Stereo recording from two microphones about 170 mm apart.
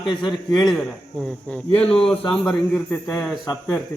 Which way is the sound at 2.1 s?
35° left (ahead or behind).